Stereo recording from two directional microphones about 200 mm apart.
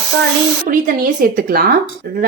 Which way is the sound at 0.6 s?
45° right (ahead or behind).